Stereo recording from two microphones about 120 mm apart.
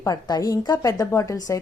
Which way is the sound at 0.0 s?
30° left (ahead or behind).